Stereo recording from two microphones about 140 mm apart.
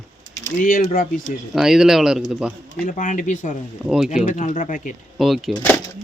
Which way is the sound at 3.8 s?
5° right (ahead or behind).